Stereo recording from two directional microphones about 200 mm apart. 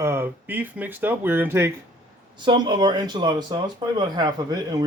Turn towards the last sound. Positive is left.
turn(degrees=-20)  # may be behind; listen again after turning